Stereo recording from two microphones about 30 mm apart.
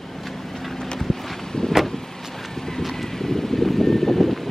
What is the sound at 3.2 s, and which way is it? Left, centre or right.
Vehicle, centre.